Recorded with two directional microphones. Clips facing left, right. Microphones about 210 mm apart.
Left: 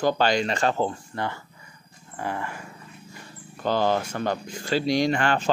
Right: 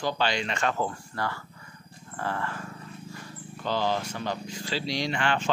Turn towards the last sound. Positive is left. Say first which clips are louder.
# left 5 dB
turn(degrees=40)  # may be behind; listen again after turning